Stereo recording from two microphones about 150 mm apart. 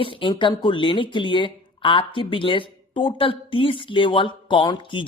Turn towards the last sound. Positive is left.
turn(degrees=35)  # may be behind; listen again after turning